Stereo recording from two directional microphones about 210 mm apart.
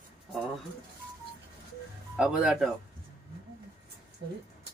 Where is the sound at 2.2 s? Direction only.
5° right (ahead or behind).